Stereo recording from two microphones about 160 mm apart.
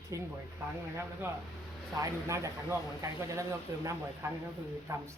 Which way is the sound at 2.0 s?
20° right (ahead or behind).